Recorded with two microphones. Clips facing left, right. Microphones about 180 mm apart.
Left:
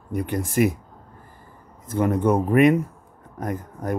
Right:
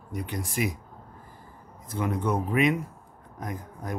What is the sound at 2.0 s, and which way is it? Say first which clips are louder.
Speech: left 7 dB; 55° left (ahead or behind).